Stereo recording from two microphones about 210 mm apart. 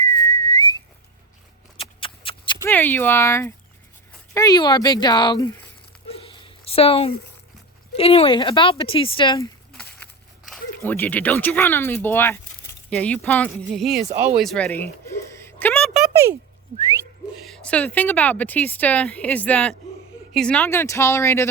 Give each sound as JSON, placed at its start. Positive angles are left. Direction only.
{"t": 0.0, "sound": "whistling", "side_deg": 15}
{"t": 1.8, "sound": "horse", "side_deg": 25}
{"t": 2.6, "sound": "speech", "side_deg": 10}
{"t": 6.1, "sound": "a sound", "side_deg": 25}
{"t": 7.9, "sound": "speech", "side_deg": 30}
{"t": 10.5, "sound": "speech", "side_deg": 10}
{"t": 14.3, "sound": "a sound", "side_deg": 0}
{"t": 17.4, "sound": "speech", "side_deg": 5}